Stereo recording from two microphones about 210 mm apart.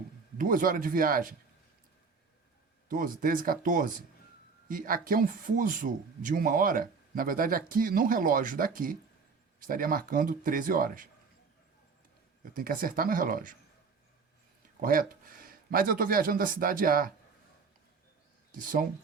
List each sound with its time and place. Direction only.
0.3 s a man's voice: 40° right (ahead or behind)
2.9 s a man's voice: 40° right (ahead or behind)
12.5 s a man's voice: 40° right (ahead or behind)
14.8 s speech: 40° right (ahead or behind)
18.5 s a man's voice: 40° right (ahead or behind)